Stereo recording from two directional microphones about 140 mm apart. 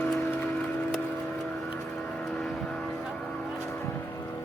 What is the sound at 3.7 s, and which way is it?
Vehicle, 15° left (ahead or behind).